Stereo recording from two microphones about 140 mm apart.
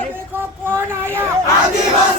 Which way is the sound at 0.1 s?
15° right (ahead or behind).